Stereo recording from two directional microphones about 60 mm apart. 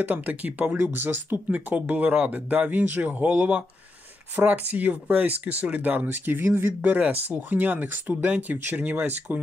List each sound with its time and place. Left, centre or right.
0.0 s speech: right